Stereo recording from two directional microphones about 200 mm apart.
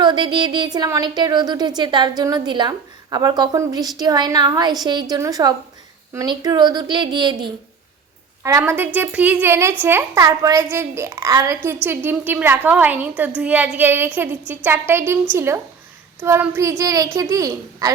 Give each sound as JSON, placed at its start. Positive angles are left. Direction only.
{"t": 0.0, "sound": "a woman's voice", "side_deg": -20}